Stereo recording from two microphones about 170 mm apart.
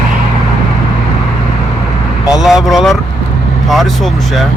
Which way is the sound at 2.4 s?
Centre (ahead or behind).